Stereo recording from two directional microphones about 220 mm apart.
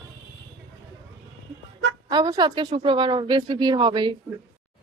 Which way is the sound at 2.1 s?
20° right (ahead or behind).